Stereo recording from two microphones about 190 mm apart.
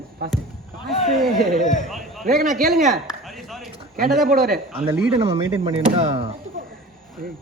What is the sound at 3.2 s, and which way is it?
A man's voice, centre (ahead or behind).